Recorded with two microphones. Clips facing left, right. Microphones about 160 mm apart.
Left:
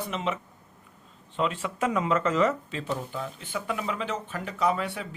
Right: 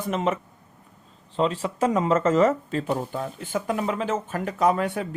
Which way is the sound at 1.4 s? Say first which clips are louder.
Right 4 dB; 35° right (ahead or behind).